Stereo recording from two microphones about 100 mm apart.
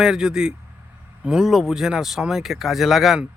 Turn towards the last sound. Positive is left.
turn(degrees=-5)  # may be behind; listen again after turning